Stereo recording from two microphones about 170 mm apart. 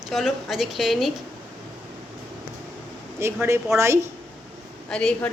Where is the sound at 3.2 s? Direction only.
15° right (ahead or behind).